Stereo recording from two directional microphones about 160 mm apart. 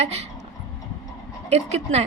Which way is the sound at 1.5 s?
45° right (ahead or behind).